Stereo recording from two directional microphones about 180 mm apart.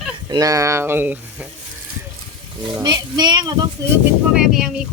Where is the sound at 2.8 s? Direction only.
25° right (ahead or behind).